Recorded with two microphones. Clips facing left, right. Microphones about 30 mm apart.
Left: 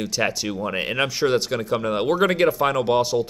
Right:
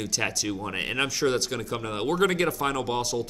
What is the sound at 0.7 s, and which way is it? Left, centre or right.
Speech, centre.